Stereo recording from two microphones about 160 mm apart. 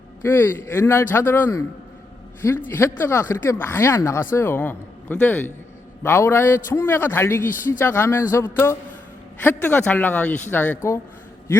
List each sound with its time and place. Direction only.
0.2 s speech: 15° left (ahead or behind)